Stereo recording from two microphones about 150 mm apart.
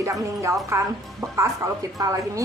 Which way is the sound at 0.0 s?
20° right (ahead or behind).